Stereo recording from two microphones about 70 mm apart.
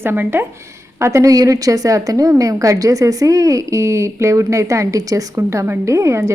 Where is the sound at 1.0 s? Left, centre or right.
Right.